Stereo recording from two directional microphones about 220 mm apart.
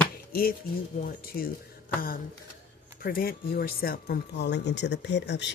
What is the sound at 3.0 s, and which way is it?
Speech, 40° left (ahead or behind).